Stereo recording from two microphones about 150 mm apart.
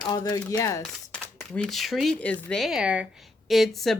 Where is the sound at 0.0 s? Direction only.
25° left (ahead or behind).